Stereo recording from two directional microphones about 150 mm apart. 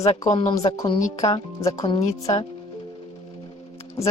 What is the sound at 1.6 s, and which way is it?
Speech, 25° left (ahead or behind).